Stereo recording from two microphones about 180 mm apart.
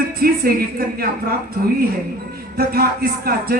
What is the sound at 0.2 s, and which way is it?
Music, 55° right (ahead or behind).